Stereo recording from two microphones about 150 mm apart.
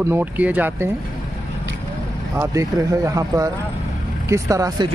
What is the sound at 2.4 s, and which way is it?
Speech, 20° right (ahead or behind).